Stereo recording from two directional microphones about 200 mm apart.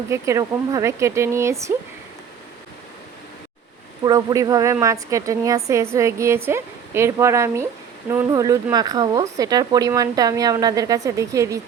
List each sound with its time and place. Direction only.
0.1 s a woman's voice: 15° right (ahead or behind)
4.0 s a woman's voice: 20° right (ahead or behind)